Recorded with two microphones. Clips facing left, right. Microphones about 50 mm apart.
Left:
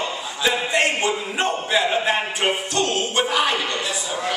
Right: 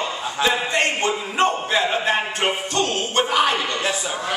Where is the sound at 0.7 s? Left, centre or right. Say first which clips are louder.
Even; centre.